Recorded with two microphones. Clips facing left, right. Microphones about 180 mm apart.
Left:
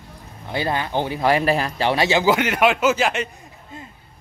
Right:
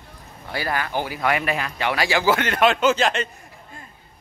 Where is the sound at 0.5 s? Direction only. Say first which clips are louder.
Left 3 dB; 20° left (ahead or behind).